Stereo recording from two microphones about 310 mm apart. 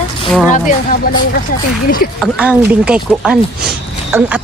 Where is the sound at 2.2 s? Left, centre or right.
Centre.